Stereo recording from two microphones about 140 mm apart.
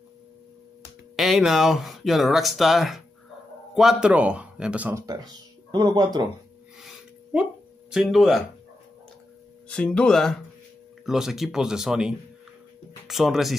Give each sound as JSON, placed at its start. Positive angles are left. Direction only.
{"t": 1.1, "sound": "speech", "side_deg": 0}
{"t": 4.9, "sound": "speech", "side_deg": -25}
{"t": 7.9, "sound": "speech", "side_deg": 0}
{"t": 9.7, "sound": "speech", "side_deg": 5}